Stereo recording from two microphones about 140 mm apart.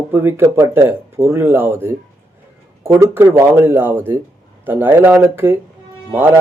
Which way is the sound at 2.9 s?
20° right (ahead or behind).